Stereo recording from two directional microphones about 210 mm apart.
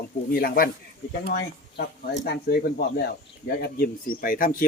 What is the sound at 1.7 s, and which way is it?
Speech, 50° left (ahead or behind).